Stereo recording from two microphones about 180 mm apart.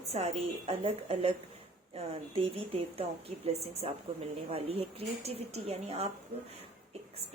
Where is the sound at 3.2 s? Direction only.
35° right (ahead or behind).